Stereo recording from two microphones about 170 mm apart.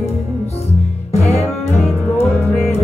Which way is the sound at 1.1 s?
40° left (ahead or behind).